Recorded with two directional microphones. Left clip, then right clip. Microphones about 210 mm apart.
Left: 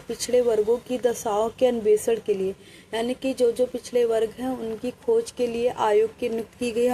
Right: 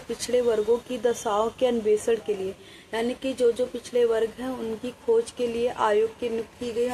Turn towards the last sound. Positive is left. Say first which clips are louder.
# left 2 dB
turn(degrees=40)  # may be behind; listen again after turning